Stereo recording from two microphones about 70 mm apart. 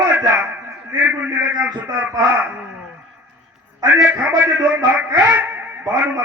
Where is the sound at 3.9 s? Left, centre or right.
Right.